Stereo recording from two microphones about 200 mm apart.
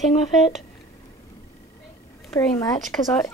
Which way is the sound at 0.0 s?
Centre (ahead or behind).